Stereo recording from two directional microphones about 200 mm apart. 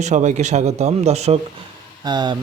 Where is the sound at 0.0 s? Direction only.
35° right (ahead or behind).